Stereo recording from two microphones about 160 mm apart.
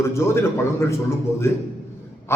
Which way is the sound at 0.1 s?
15° left (ahead or behind).